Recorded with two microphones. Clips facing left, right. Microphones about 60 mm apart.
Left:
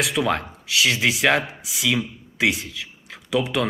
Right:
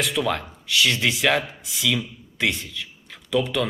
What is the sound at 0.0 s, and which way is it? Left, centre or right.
Speech, centre.